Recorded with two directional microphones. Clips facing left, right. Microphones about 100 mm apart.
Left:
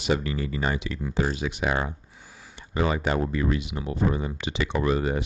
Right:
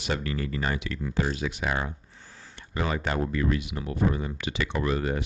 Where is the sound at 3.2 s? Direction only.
20° left (ahead or behind).